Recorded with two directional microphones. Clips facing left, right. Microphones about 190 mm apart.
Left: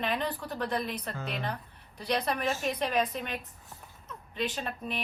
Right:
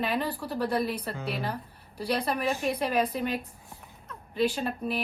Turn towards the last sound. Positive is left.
turn(degrees=-5)  # may be behind; listen again after turning